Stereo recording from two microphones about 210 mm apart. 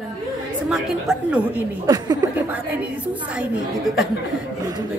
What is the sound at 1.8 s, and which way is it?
Speech, 20° right (ahead or behind).